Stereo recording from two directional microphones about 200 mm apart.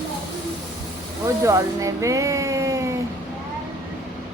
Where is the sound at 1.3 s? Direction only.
15° right (ahead or behind).